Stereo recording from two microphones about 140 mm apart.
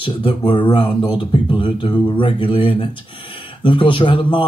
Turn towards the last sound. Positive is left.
turn(degrees=35)  # may be behind; listen again after turning